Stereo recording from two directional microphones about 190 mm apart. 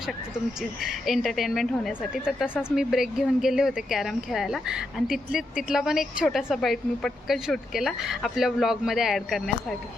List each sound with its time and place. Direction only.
0.8 s speech: centre (ahead or behind)